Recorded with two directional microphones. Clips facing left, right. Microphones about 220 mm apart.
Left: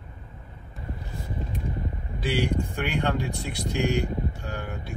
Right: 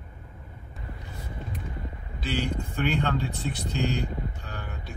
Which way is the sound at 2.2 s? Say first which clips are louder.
Left 4 dB; 10° left (ahead or behind).